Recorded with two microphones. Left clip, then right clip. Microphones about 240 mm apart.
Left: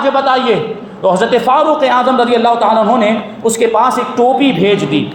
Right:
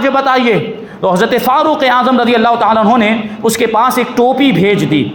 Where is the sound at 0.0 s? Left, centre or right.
Right.